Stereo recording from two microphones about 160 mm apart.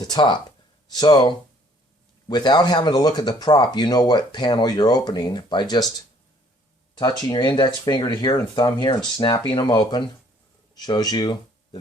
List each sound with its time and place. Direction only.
0.0 s speech: 25° left (ahead or behind)
6.9 s speech: 30° left (ahead or behind)